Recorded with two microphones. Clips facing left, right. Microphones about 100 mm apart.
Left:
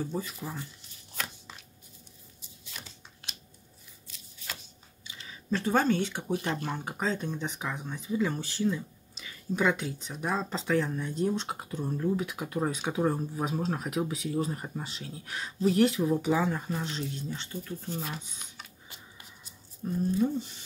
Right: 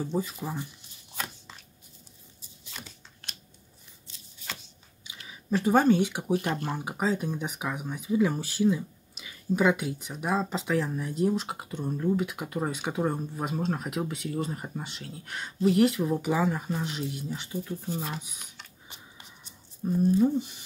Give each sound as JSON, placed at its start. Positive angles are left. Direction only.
{"t": 0.0, "sound": "speech", "side_deg": -15}
{"t": 5.0, "sound": "speech", "side_deg": -15}
{"t": 19.8, "sound": "speech", "side_deg": -15}